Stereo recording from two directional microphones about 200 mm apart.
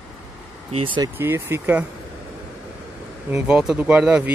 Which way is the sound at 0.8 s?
20° right (ahead or behind).